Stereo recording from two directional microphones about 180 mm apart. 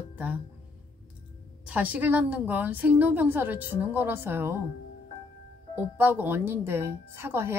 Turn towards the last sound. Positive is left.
turn(degrees=-10)  # may be behind; listen again after turning